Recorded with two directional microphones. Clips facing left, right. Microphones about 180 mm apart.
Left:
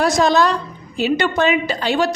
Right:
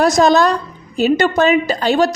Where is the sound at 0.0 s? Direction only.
45° right (ahead or behind).